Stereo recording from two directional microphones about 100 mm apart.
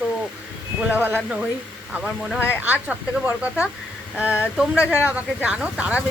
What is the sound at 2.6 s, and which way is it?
Speech, 20° right (ahead or behind).